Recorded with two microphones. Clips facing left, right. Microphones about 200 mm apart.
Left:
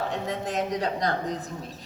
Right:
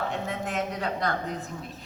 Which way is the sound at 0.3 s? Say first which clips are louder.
Left 2 dB; 35° left (ahead or behind).